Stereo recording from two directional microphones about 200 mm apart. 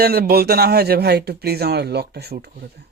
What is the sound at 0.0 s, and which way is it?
Speech, 50° right (ahead or behind).